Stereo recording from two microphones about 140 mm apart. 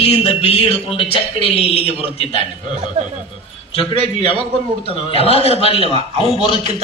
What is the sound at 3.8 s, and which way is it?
A man's voice, 40° left (ahead or behind).